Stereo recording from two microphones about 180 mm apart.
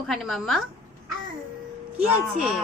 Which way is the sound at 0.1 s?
Centre (ahead or behind).